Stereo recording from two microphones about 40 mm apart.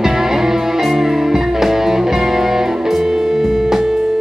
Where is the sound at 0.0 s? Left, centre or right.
Centre.